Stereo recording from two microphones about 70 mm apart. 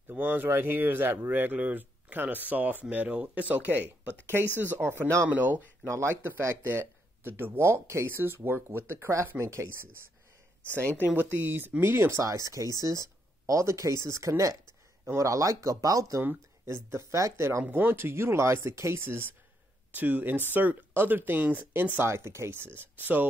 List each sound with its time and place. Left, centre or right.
0.1 s speech: right
5.9 s speech: right
12.2 s speech: right
16.2 s speech: right
17.6 s speech: right
22.0 s speech: right